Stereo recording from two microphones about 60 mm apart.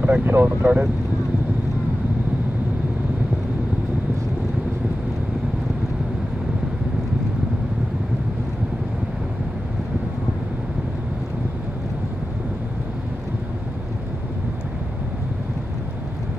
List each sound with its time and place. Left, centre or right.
0.0 s speech: right